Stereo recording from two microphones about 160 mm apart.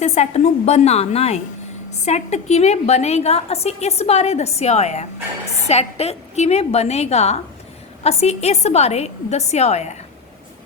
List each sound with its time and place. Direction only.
0.0 s a woman's voice: 45° left (ahead or behind)